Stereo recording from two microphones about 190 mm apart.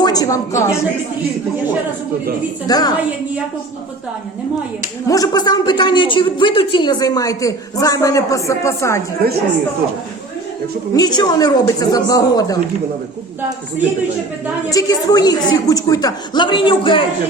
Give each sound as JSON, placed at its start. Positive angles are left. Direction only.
{"t": 0.0, "sound": "a woman's voice", "side_deg": 20}
{"t": 2.6, "sound": "a woman's voice", "side_deg": 20}
{"t": 5.0, "sound": "a woman's voice", "side_deg": 20}
{"t": 10.9, "sound": "a woman's voice", "side_deg": 20}
{"t": 14.7, "sound": "a woman's voice", "side_deg": 20}